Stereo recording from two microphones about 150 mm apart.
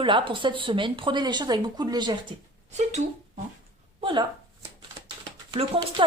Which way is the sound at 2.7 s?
50° right (ahead or behind).